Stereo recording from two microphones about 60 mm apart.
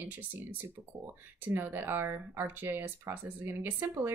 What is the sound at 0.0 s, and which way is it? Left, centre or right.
Speech, right.